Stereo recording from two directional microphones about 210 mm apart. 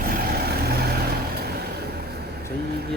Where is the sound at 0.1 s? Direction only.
45° right (ahead or behind).